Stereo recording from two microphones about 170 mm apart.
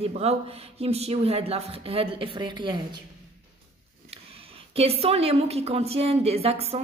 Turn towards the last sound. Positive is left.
turn(degrees=-35)  # may be behind; listen again after turning